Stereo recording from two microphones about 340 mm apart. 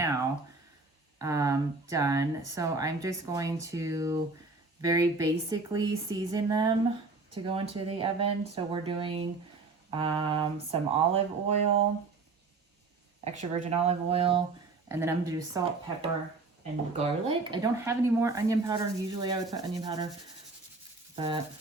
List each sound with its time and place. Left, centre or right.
1.2 s speech: centre
13.2 s speech: centre
21.2 s speech: centre